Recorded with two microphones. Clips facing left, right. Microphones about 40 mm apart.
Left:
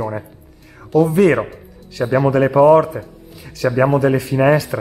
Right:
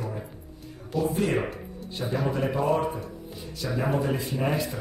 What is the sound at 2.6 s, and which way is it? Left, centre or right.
Speech, left.